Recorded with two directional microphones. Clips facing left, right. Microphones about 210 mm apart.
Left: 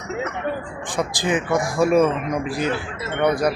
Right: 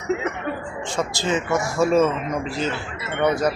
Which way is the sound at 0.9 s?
15° left (ahead or behind).